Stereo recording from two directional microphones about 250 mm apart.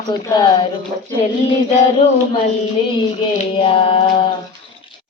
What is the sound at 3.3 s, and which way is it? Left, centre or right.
Mantra, left.